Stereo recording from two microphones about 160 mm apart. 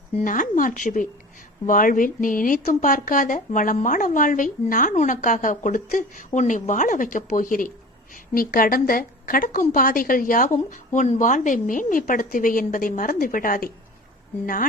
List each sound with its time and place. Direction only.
0.2 s a woman's voice: 55° left (ahead or behind)